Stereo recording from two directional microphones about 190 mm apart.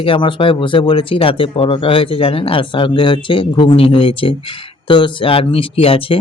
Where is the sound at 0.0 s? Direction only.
25° left (ahead or behind).